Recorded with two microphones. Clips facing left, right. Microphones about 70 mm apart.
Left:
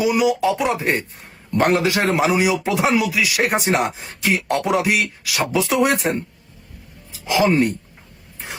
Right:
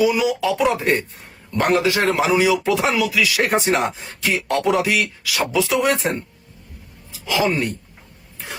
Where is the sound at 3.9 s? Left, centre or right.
Left.